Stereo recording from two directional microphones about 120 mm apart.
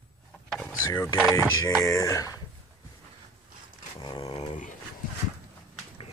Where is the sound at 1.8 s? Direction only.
25° left (ahead or behind).